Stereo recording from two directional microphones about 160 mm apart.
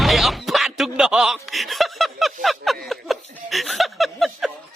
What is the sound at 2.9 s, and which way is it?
Speech, centre (ahead or behind).